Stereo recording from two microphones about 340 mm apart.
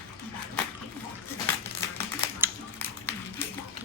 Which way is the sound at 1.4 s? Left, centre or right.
Centre.